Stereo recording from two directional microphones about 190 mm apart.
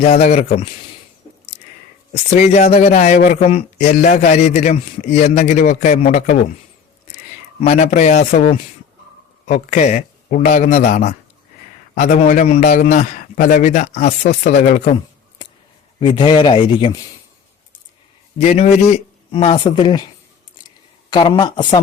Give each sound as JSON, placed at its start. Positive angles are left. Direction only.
{"t": 0.0, "sound": "a man's voice", "side_deg": 35}
{"t": 2.3, "sound": "a man's voice", "side_deg": 35}
{"t": 7.6, "sound": "a man's voice", "side_deg": 40}
{"t": 16.0, "sound": "speech", "side_deg": 25}
{"t": 18.3, "sound": "a man's voice", "side_deg": 35}
{"t": 20.7, "sound": "a sound", "side_deg": 25}